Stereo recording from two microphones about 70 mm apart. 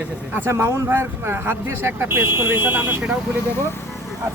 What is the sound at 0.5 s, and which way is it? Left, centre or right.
Speech, right.